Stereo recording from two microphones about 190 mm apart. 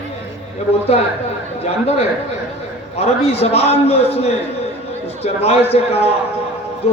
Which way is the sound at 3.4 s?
30° left (ahead or behind).